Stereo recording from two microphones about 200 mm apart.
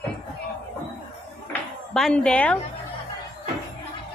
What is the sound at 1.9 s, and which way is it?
Speech, 5° left (ahead or behind).